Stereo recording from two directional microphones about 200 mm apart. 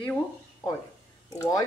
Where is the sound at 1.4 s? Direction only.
15° left (ahead or behind).